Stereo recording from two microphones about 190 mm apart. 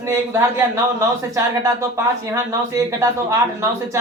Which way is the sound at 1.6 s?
15° right (ahead or behind).